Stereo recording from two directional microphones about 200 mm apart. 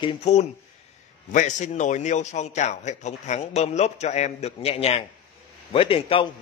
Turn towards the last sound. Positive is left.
turn(degrees=25)  # may be behind; listen again after turning